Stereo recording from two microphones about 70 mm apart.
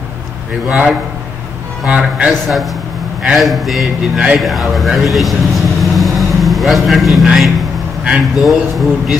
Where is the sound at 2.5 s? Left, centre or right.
Centre.